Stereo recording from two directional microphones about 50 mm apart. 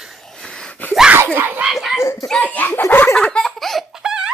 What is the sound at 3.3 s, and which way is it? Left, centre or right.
Laughter, centre.